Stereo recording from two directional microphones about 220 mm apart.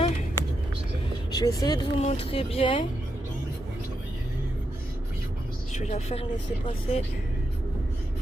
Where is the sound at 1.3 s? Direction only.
15° left (ahead or behind).